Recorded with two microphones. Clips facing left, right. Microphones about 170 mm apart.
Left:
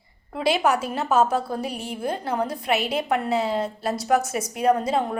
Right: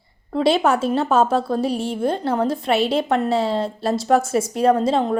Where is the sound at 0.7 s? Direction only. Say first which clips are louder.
Right 4 dB; 30° right (ahead or behind).